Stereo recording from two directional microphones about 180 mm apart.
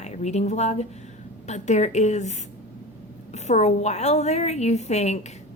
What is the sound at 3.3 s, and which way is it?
A woman's voice, 40° left (ahead or behind).